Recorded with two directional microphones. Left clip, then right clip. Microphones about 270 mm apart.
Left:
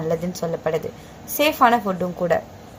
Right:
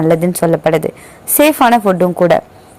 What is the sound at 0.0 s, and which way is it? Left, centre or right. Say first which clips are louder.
A woman's voice: right 12 dB; right.